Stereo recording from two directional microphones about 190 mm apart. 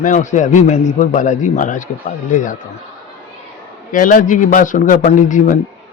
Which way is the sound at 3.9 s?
45° left (ahead or behind).